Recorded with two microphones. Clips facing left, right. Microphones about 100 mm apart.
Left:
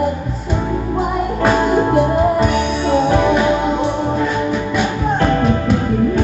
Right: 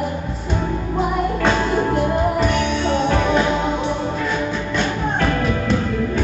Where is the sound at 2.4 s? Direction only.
5° left (ahead or behind).